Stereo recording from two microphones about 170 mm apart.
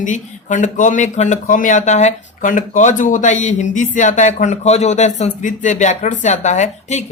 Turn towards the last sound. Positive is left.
turn(degrees=45)  # may be behind; listen again after turning